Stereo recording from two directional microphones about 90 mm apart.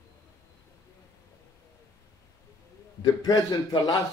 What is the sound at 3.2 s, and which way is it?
Speech, 50° left (ahead or behind).